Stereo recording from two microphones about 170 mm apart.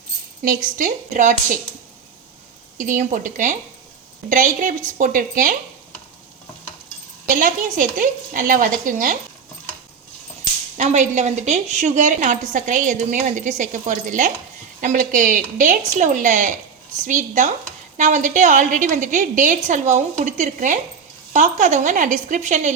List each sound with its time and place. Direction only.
0.4 s a woman's voice: 50° right (ahead or behind)
2.7 s a woman's voice: 50° right (ahead or behind)
7.3 s a woman's voice: 50° right (ahead or behind)
10.8 s a woman's voice: 45° right (ahead or behind)